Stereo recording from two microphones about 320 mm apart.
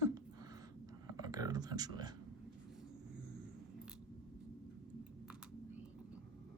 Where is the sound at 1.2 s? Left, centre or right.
Centre.